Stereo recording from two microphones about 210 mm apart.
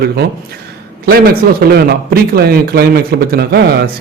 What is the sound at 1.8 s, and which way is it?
Speech, 45° right (ahead or behind).